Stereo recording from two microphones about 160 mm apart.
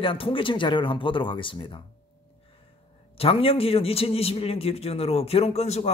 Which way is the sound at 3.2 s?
35° left (ahead or behind).